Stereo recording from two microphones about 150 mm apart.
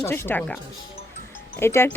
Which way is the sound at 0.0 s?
15° left (ahead or behind).